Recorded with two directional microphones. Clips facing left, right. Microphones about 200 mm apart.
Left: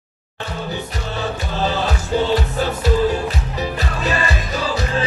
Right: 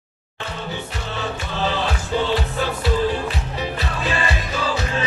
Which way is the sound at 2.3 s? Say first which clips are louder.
Left 3 dB; 45° left (ahead or behind).